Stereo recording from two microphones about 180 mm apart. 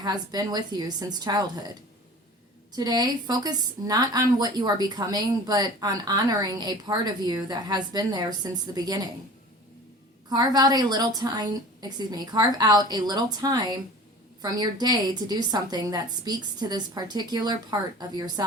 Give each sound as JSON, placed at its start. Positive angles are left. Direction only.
{"t": 0.0, "sound": "a woman's voice", "side_deg": -20}
{"t": 2.7, "sound": "a woman's voice", "side_deg": -20}
{"t": 10.2, "sound": "a woman's voice", "side_deg": -20}